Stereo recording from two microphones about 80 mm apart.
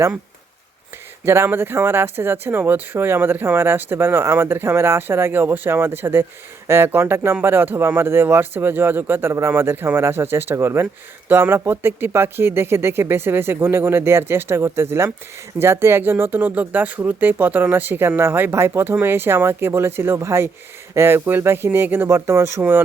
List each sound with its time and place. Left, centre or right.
1.2 s speech: right